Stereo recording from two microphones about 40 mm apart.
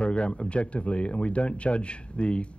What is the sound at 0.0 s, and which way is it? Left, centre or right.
Speech, left.